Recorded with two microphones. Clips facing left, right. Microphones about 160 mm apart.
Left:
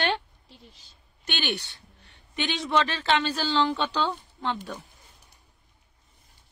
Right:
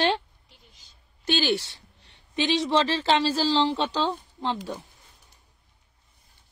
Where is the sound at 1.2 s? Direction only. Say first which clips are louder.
Right 7 dB; 35° right (ahead or behind).